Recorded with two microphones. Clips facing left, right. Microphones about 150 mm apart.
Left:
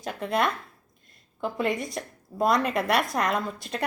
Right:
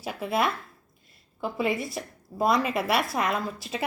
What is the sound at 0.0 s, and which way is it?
Speech, 5° right (ahead or behind).